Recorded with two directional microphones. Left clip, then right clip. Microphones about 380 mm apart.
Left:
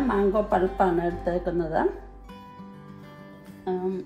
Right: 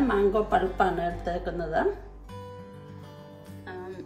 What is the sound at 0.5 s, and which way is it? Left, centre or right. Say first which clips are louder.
Speech: left 2 dB; centre.